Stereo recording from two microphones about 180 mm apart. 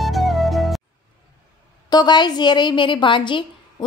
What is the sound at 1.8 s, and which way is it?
A woman's voice, 25° left (ahead or behind).